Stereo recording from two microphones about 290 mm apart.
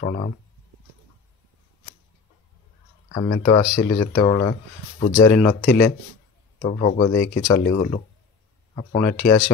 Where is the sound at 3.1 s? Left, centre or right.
Centre.